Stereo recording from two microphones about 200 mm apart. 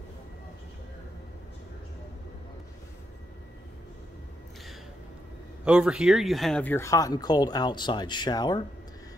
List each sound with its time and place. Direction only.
5.7 s speech: 5° right (ahead or behind); by 8.6 s 20° left (ahead or behind)